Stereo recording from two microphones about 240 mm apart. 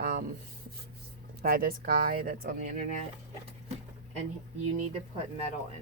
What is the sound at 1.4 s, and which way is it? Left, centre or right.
Speech, right.